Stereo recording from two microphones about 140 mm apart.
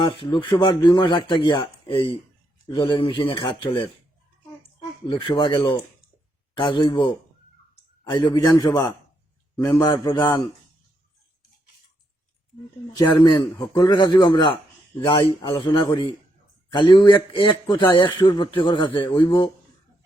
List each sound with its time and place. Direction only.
0.0 s speech: 35° left (ahead or behind)
5.0 s speech: 35° left (ahead or behind)
8.1 s a man's voice: 30° left (ahead or behind)
13.1 s speech: 35° left (ahead or behind)